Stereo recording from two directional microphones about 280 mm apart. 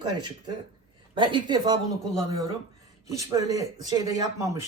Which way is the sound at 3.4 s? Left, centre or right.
Left.